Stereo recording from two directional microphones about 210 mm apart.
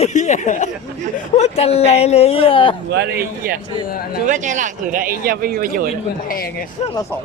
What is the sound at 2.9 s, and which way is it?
Speech, 50° right (ahead or behind).